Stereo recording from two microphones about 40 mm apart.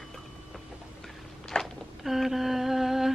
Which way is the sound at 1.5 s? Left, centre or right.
Centre.